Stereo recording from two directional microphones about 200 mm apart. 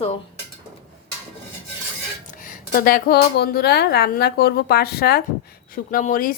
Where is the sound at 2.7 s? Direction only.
45° left (ahead or behind).